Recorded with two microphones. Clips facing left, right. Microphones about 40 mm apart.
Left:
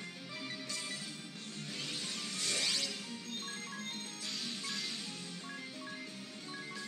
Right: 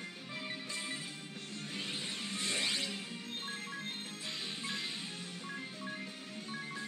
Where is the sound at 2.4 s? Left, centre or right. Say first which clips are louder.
Right 1 dB; right.